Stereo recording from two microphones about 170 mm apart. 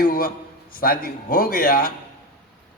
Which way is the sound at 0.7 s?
60° left (ahead or behind).